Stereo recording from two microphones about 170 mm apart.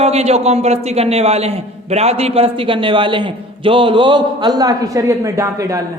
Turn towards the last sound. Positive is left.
turn(degrees=-20)  # may be behind; listen again after turning